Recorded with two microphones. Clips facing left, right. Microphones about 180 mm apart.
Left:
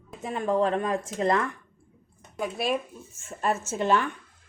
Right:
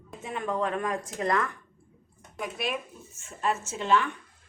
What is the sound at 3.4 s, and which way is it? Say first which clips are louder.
Speech: left 3 dB; 45° left (ahead or behind).